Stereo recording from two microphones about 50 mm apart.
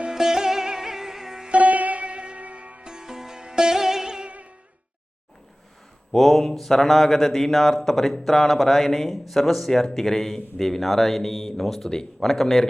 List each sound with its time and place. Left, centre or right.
0.1 s sitar: centre
1.5 s sitar: right
2.8 s sitar: centre
6.1 s a man's voice: centre